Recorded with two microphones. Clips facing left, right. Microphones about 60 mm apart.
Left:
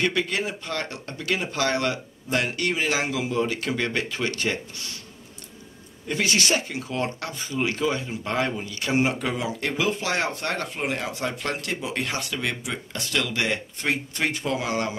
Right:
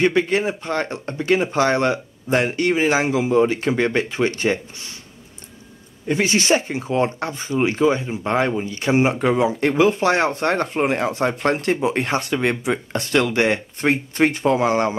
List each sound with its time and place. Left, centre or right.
0.0 s speech: right
6.0 s speech: right